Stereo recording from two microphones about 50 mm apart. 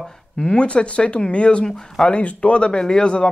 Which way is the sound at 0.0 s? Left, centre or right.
Centre.